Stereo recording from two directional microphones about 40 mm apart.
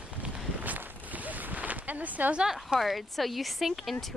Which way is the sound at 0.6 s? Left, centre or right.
Right.